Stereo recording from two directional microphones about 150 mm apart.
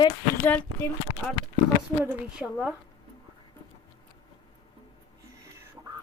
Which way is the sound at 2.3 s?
5° right (ahead or behind).